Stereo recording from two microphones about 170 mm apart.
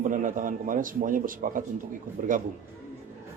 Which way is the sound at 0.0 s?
50° right (ahead or behind).